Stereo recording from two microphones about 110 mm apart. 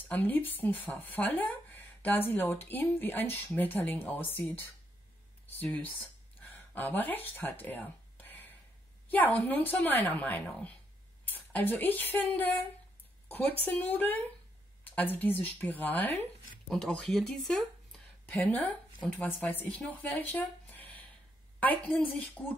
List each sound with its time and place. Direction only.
0.1 s speech: 15° left (ahead or behind)
16.6 s speech: 5° left (ahead or behind)
18.2 s speech: 15° left (ahead or behind)
19.9 s a sound: 15° left (ahead or behind)
21.5 s speech: 15° left (ahead or behind)